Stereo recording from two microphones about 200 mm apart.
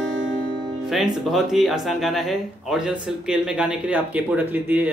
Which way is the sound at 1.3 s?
Centre (ahead or behind).